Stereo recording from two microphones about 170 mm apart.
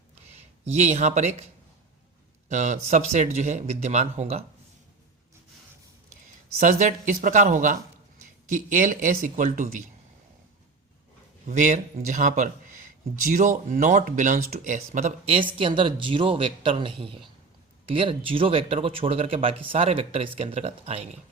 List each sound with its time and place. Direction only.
0.3 s speech: 40° right (ahead or behind)
2.5 s speech: 45° right (ahead or behind)
6.6 s speech: 45° right (ahead or behind)
11.4 s speech: 45° right (ahead or behind)
15.4 s speech: 30° right (ahead or behind)